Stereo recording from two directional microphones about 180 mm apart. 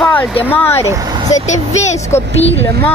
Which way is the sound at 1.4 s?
40° left (ahead or behind).